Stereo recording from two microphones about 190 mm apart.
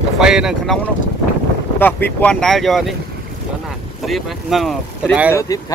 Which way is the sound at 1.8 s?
10° left (ahead or behind).